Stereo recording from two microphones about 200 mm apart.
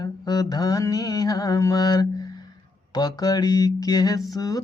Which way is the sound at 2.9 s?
20° left (ahead or behind).